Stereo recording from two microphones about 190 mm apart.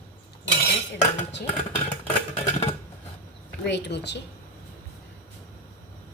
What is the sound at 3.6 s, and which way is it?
Speech, 60° left (ahead or behind).